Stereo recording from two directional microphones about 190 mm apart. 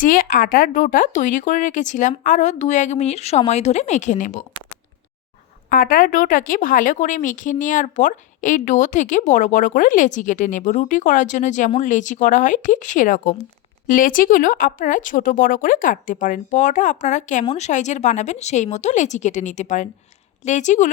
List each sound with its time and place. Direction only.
0.0 s speech: 45° left (ahead or behind)
5.6 s speech: 45° left (ahead or behind)